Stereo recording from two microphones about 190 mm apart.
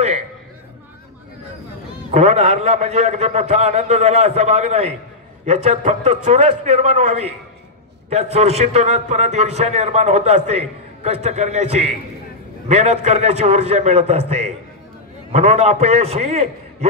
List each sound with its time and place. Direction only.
2.0 s a man's voice: 35° right (ahead or behind)